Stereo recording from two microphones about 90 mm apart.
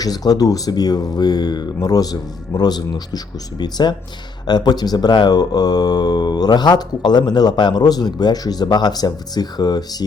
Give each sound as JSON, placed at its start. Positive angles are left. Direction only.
{"t": 0.0, "sound": "speech", "side_deg": 45}